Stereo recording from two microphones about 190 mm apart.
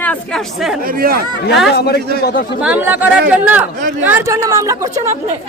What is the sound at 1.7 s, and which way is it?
Speech, 60° left (ahead or behind).